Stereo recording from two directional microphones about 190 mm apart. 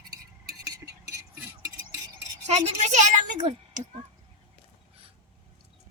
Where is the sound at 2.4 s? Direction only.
35° right (ahead or behind).